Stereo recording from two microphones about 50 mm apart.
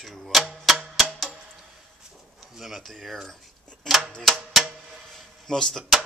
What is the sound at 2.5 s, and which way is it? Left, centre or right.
Speech, centre.